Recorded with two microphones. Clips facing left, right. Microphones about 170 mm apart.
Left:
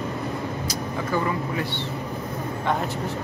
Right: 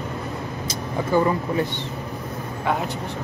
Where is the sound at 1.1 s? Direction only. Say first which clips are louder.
Right 6 dB; 25° right (ahead or behind).